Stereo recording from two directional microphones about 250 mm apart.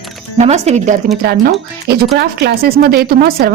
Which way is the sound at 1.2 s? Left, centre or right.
Right.